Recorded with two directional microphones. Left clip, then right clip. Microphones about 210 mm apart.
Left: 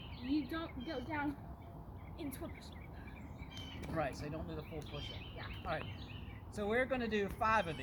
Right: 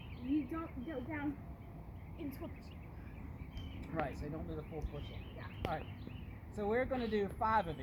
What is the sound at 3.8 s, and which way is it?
Speech, 10° left (ahead or behind).